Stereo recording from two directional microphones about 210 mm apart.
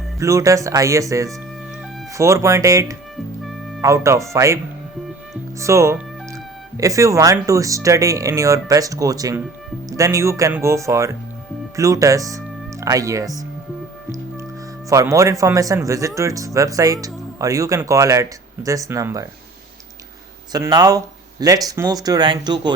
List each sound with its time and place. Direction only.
0.2 s speech: 15° right (ahead or behind)
14.8 s speech: 15° right (ahead or behind)
20.5 s speech: 20° right (ahead or behind)